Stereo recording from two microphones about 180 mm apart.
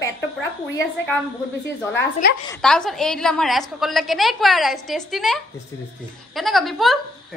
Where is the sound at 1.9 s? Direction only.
65° left (ahead or behind).